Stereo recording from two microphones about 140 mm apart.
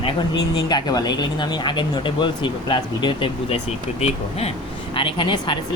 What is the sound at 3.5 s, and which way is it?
Speech, 50° left (ahead or behind).